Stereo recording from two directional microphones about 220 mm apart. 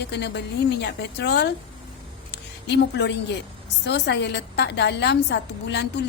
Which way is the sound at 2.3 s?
50° left (ahead or behind).